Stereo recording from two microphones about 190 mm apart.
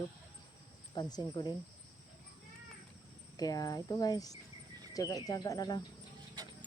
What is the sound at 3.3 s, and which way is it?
Speech, 20° left (ahead or behind).